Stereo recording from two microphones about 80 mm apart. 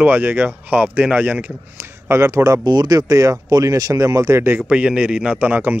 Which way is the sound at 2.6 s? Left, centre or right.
Right.